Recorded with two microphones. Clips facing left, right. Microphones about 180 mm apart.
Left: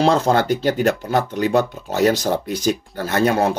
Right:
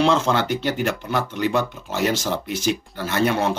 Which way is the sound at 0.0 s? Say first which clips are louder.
Left 3 dB; 40° left (ahead or behind).